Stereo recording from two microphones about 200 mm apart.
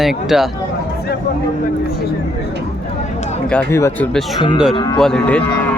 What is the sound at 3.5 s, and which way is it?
Speech, 15° left (ahead or behind).